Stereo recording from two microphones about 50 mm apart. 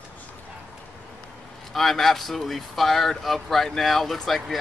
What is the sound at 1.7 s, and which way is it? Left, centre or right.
Speech, centre.